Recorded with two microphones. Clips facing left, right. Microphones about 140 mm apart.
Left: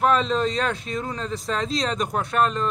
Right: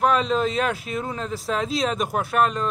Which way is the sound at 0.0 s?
Centre (ahead or behind).